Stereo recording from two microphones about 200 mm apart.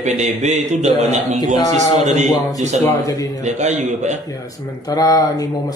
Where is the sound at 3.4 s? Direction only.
35° right (ahead or behind).